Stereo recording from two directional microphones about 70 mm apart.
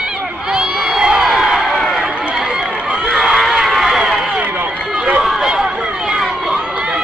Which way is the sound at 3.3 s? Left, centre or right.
Centre.